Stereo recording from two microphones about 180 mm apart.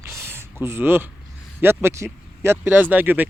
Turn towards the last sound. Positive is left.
turn(degrees=-10)  # may be behind; listen again after turning